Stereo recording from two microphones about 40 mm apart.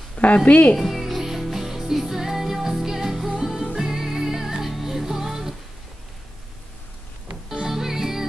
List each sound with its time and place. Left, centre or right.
0.1 s a woman's voice: left
0.7 s music: centre
7.6 s music: centre